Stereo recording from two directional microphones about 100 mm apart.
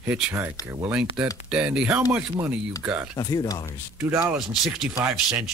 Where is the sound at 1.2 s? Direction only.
5° right (ahead or behind).